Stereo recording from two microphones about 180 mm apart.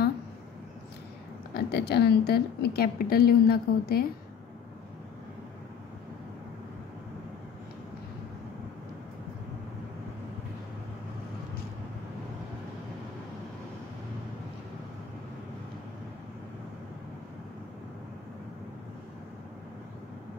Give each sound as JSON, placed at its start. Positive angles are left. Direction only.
{"t": 1.5, "sound": "a woman's voice", "side_deg": 65}